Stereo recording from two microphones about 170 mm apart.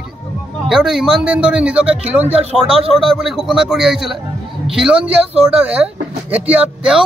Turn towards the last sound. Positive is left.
turn(degrees=-5)  # may be behind; listen again after turning